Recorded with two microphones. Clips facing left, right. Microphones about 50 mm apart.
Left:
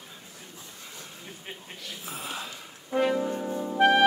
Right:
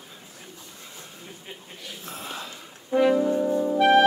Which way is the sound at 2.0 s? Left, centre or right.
Centre.